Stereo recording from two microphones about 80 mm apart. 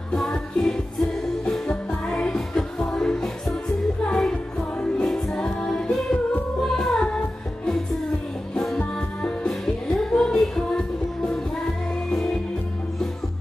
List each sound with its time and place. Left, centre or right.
0.1 s music: centre